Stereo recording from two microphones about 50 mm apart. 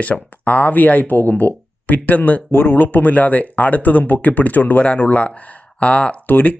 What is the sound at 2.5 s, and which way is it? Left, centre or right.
Speech, left.